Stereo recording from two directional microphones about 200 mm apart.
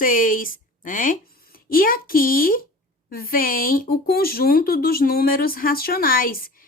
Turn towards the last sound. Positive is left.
turn(degrees=45)  # may be behind; listen again after turning